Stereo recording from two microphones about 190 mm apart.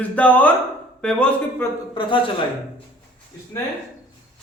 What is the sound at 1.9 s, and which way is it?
Speech, 25° left (ahead or behind).